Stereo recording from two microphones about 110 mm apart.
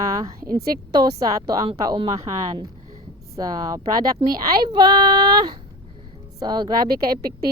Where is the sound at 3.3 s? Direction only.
35° right (ahead or behind).